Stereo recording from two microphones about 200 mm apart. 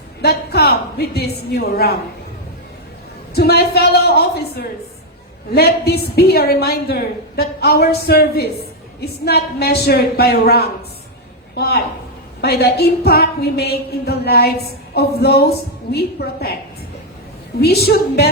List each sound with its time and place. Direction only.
0.2 s a woman's voice: 55° left (ahead or behind)
3.3 s a woman's voice: 55° left (ahead or behind)
17.6 s a woman's voice: 55° left (ahead or behind)